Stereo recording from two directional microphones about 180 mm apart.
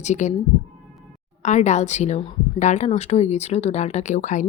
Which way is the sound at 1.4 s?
40° left (ahead or behind).